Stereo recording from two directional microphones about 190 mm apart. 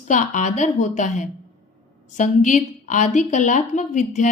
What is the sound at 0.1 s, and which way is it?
A woman's voice, 40° left (ahead or behind).